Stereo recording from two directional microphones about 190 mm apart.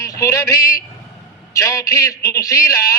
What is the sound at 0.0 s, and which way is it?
A man's voice, 15° left (ahead or behind).